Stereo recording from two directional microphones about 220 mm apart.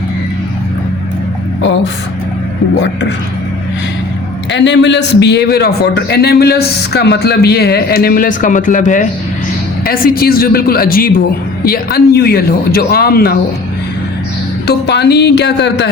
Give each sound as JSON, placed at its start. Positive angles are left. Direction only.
{"t": 4.5, "sound": "a man's voice", "side_deg": 55}
{"t": 14.7, "sound": "a man's voice", "side_deg": 50}